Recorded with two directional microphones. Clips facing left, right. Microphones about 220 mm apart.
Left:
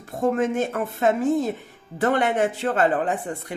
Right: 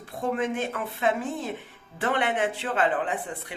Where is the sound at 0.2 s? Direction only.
45° left (ahead or behind).